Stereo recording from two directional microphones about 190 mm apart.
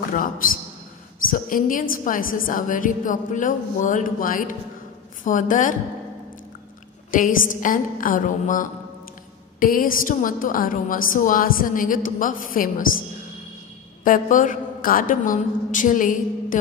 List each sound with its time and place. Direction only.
0.1 s a woman's voice: 45° left (ahead or behind)
7.1 s a woman's voice: 45° left (ahead or behind)
14.0 s a man's voice: 45° left (ahead or behind)